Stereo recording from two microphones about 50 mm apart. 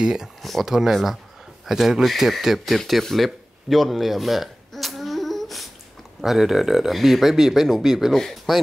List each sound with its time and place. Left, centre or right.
0.0 s speech: centre
0.4 s speech: centre